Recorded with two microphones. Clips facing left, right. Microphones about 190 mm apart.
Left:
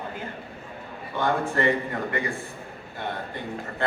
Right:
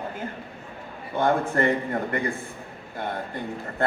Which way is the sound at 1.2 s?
50° right (ahead or behind).